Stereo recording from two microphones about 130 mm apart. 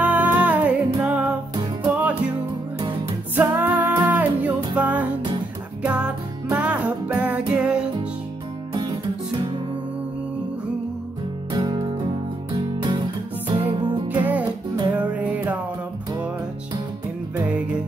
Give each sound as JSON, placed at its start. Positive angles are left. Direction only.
{"t": 0.0, "sound": "music", "side_deg": -10}
{"t": 3.3, "sound": "music", "side_deg": -15}
{"t": 11.5, "sound": "music", "side_deg": -35}
{"t": 12.5, "sound": "guitar", "side_deg": -35}
{"t": 13.5, "sound": "music", "side_deg": -40}
{"t": 14.0, "sound": "music", "side_deg": -15}
{"t": 17.4, "sound": "music", "side_deg": -10}